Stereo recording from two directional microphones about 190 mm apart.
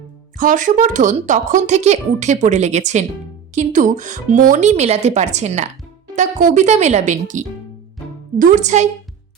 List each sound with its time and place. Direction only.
0.3 s a woman's voice: 45° right (ahead or behind)